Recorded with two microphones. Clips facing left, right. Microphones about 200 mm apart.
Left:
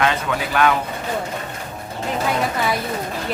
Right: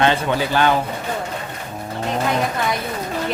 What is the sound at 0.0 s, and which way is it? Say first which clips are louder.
Speech: right 3 dB; 30° right (ahead or behind).